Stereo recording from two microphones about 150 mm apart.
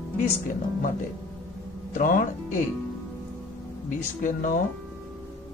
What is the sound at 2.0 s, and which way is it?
Speech, 65° left (ahead or behind).